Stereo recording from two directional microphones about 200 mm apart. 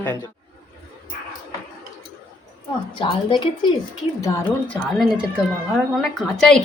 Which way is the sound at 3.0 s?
25° left (ahead or behind).